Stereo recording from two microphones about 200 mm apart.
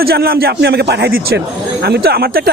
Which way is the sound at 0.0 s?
50° right (ahead or behind).